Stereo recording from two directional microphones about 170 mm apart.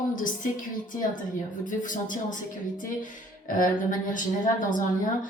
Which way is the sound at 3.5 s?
50° left (ahead or behind).